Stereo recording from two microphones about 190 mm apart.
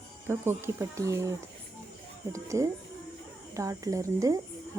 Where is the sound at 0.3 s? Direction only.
10° right (ahead or behind).